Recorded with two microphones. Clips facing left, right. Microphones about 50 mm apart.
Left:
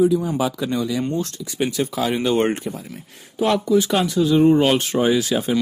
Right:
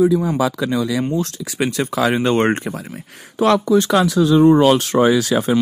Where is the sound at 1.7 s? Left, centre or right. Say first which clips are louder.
Right 5 dB; right.